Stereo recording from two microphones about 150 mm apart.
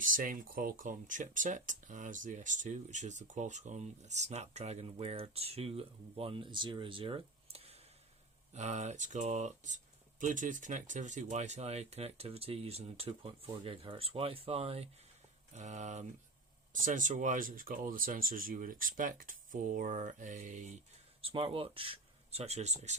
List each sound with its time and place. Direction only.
0.0 s speech: 65° right (ahead or behind)
21.2 s speech: 40° right (ahead or behind)